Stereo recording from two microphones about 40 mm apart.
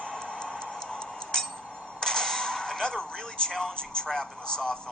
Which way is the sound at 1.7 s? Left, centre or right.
Centre.